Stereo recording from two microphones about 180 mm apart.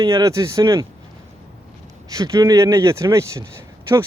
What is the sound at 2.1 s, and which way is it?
Speech, 20° right (ahead or behind).